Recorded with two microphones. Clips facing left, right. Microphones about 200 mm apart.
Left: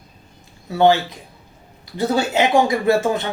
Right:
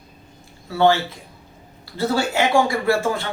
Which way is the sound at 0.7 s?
15° left (ahead or behind).